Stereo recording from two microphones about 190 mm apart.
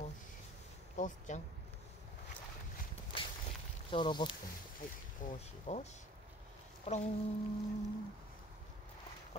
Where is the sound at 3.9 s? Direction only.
25° left (ahead or behind).